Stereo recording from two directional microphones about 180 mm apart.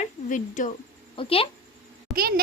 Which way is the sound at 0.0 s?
45° left (ahead or behind).